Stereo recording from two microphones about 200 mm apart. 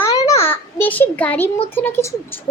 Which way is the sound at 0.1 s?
15° left (ahead or behind).